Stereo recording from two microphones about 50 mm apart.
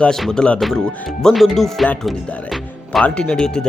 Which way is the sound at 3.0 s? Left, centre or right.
Left.